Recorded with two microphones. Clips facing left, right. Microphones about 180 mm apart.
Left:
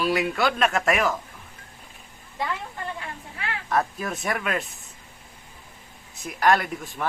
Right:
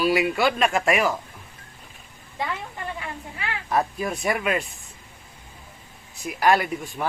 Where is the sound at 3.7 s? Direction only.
Centre (ahead or behind).